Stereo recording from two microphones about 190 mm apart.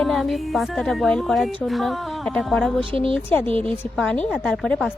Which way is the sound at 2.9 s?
30° right (ahead or behind).